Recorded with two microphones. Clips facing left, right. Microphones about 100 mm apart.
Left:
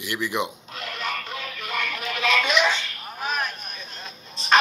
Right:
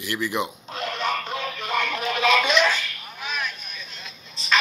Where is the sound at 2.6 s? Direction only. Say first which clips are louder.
Right 1 dB; 25° left (ahead or behind).